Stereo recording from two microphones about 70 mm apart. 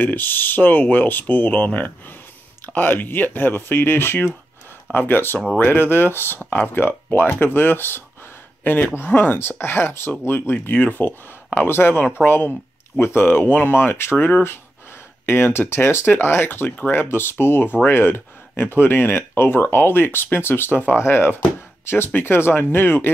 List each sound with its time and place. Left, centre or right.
0.0 s speech: left
16.6 s speech: left
16.9 s speech: left